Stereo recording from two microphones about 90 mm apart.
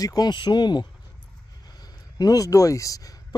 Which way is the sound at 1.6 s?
50° left (ahead or behind).